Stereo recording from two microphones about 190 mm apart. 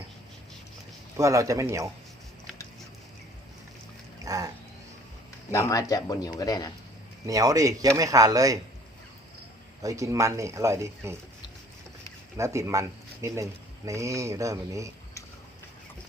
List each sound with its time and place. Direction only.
1.1 s speech: 15° right (ahead or behind)
4.3 s a sound: 20° right (ahead or behind)
5.5 s speech: 15° left (ahead or behind)
7.3 s speech: 15° right (ahead or behind)
9.8 s speech: 15° right (ahead or behind)
12.4 s speech: 15° right (ahead or behind)